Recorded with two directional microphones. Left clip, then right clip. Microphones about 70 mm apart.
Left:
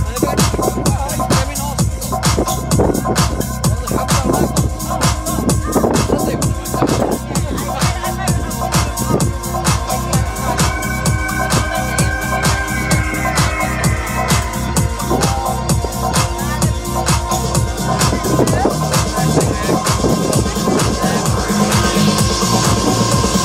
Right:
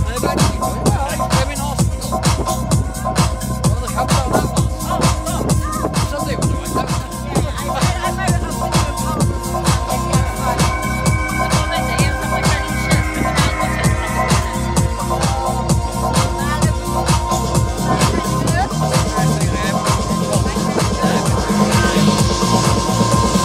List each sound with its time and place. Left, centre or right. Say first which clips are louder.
1.3 s music: left 1 dB; left
7.8 s music: right 1 dB; left
16.0 s music: even; left
19.8 s music: left 3 dB; left